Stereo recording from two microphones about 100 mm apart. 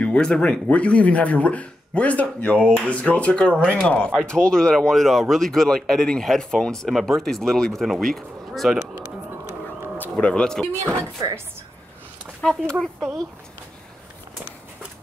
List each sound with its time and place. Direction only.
0.0 s speech: 10° left (ahead or behind)
9.9 s speech: 15° left (ahead or behind)
10.7 s speech: 25° right (ahead or behind)
12.4 s speech: 10° left (ahead or behind)